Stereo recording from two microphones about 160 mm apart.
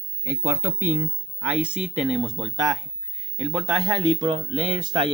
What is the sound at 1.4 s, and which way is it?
Speech, 10° right (ahead or behind).